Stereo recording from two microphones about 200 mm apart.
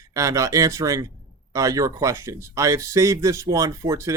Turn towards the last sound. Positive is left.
turn(degrees=-15)  # may be behind; listen again after turning